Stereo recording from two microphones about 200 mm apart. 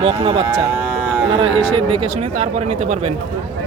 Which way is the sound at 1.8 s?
30° right (ahead or behind).